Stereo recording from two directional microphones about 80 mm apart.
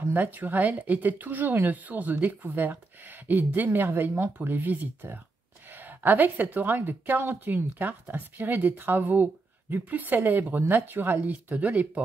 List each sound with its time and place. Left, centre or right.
0.1 s speech: right